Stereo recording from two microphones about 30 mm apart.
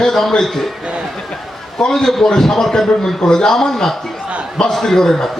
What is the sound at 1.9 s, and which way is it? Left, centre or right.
A man's voice, centre.